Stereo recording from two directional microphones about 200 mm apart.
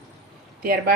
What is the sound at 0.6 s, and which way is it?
Speech, 50° right (ahead or behind).